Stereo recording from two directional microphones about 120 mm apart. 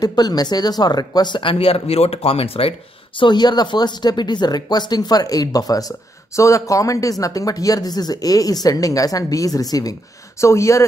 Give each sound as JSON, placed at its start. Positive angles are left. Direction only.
{"t": 0.0, "sound": "speech", "side_deg": 35}
{"t": 3.2, "sound": "speech", "side_deg": 40}